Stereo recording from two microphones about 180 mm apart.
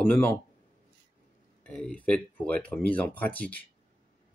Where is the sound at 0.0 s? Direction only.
10° left (ahead or behind).